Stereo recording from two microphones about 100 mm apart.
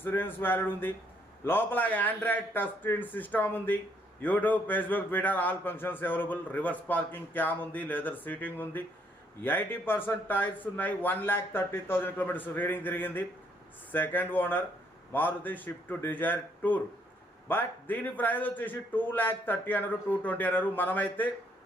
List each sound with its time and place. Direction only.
0.0 s a man's voice: 20° left (ahead or behind)